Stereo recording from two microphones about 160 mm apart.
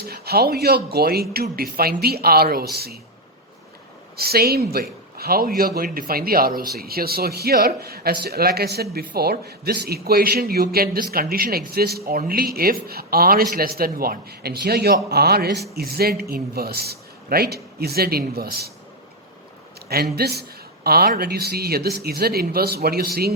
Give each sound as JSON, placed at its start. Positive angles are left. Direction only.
{"t": 0.0, "sound": "speech", "side_deg": -75}
{"t": 4.2, "sound": "speech", "side_deg": -75}
{"t": 20.1, "sound": "a man's voice", "side_deg": -80}